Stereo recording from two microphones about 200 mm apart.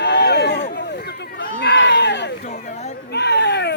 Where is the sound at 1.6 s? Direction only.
60° left (ahead or behind).